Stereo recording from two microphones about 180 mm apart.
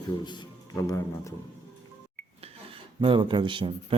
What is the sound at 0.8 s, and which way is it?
Speech, 15° left (ahead or behind).